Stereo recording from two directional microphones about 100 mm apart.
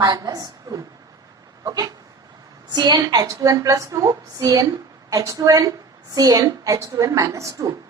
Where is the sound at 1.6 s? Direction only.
40° right (ahead or behind).